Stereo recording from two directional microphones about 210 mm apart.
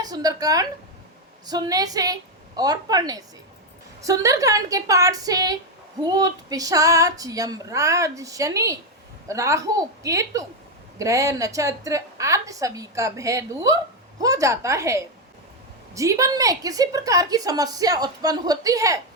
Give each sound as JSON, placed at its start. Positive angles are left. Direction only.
{"t": 0.0, "sound": "a woman's voice", "side_deg": -20}